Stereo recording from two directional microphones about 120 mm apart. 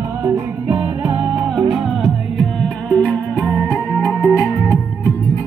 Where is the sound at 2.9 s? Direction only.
10° left (ahead or behind).